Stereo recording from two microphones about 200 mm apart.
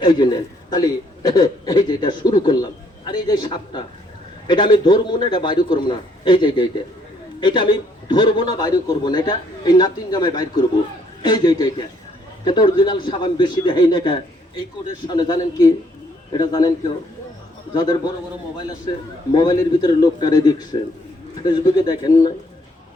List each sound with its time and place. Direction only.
0.0 s a man's voice: 20° left (ahead or behind)
19.3 s a man's voice: 20° left (ahead or behind)